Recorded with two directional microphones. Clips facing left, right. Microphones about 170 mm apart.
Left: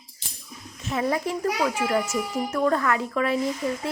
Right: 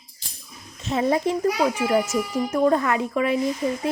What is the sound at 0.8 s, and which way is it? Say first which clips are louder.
A child's voice: right 4 dB; 25° right (ahead or behind).